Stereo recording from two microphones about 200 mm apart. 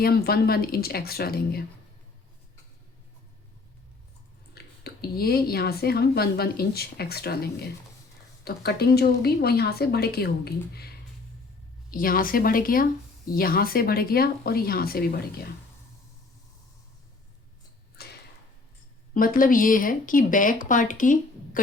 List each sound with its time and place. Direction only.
0.0 s speech: 50° left (ahead or behind)
4.5 s speech: 50° left (ahead or behind)
17.9 s a sound: 55° left (ahead or behind)
19.1 s speech: 45° left (ahead or behind)